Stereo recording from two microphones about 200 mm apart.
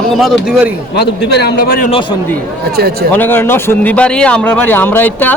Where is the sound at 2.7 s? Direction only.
50° right (ahead or behind).